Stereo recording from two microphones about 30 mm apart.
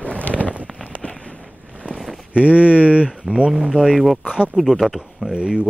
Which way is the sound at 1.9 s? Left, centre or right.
Centre.